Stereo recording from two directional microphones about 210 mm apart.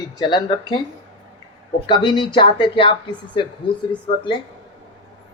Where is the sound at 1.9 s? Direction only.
20° left (ahead or behind).